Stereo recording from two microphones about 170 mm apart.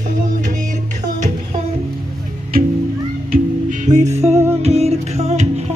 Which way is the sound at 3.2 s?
50° right (ahead or behind).